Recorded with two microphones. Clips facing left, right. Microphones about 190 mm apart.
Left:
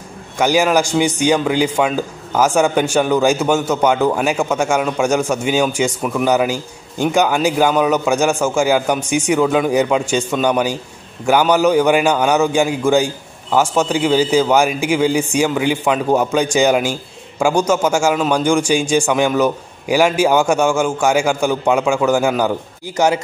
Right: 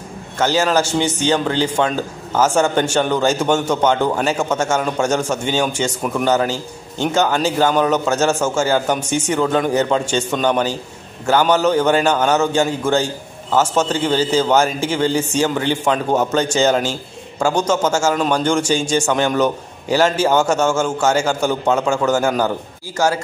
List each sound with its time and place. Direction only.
0.4 s a man's voice: 15° left (ahead or behind)